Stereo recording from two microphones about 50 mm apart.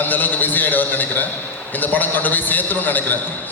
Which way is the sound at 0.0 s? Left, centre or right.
Left.